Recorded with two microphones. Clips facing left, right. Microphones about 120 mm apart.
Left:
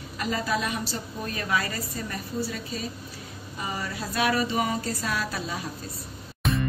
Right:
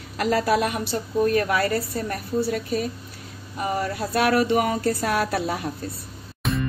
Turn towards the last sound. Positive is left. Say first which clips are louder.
# right 1 dB
turn(degrees=0)  # may be behind; listen again after turning